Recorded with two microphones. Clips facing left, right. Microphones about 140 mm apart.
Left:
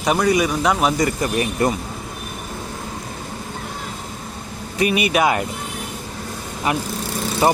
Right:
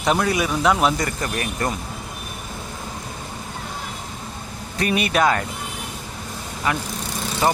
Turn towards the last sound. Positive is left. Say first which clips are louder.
# left 3 dB
turn(degrees=20)  # may be behind; listen again after turning